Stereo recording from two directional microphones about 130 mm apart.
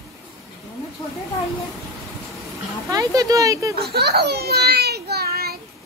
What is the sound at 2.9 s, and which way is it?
Speech, 25° right (ahead or behind).